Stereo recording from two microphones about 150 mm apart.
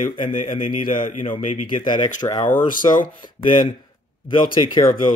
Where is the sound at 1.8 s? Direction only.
30° left (ahead or behind).